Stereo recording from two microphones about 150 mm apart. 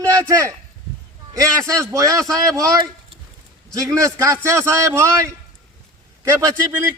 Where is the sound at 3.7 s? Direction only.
20° right (ahead or behind).